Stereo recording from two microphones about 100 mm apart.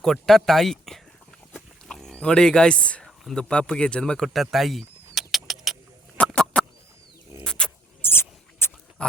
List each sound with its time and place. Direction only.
0.0 s speech: 5° left (ahead or behind)
1.5 s livestock: 5° left (ahead or behind)
6.2 s a sound: 5° left (ahead or behind)
7.4 s vehicle: 10° left (ahead or behind)
8.0 s mouse: 25° left (ahead or behind)
9.0 s dog: 10° left (ahead or behind)